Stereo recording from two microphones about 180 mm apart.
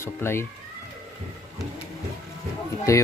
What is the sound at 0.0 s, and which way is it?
Speech, 15° left (ahead or behind).